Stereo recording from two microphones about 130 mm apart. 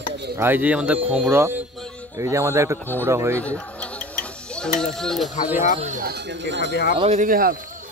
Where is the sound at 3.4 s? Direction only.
10° left (ahead or behind).